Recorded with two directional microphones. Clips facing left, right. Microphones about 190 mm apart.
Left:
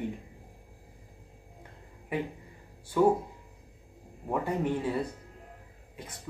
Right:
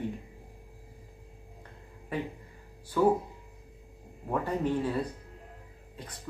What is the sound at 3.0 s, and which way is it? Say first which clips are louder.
Speech: left 1 dB; 15° left (ahead or behind).